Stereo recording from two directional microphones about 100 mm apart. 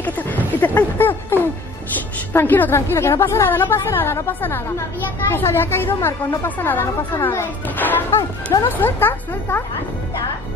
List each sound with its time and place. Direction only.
0.0 s a sound: 20° left (ahead or behind)
2.3 s a woman's voice: 20° left (ahead or behind)
8.2 s speech: 45° left (ahead or behind)
8.6 s a woman's voice: 20° left (ahead or behind)